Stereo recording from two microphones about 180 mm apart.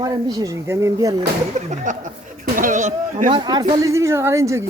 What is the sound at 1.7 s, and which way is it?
Speech, 45° right (ahead or behind).